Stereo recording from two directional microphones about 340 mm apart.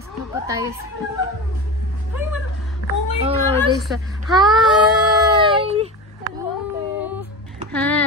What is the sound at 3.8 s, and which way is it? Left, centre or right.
Speech, centre.